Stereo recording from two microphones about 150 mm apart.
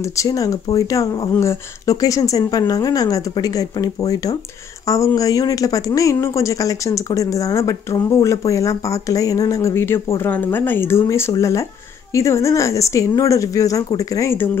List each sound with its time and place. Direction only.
0.0 s speech: 20° left (ahead or behind)